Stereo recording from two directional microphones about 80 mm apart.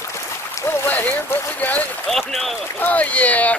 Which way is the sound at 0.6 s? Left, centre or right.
Left.